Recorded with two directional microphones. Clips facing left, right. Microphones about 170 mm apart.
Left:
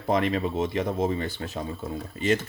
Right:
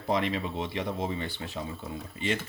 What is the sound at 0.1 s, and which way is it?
Speech, 50° left (ahead or behind).